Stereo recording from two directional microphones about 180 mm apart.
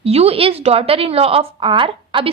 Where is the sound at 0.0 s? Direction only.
35° right (ahead or behind).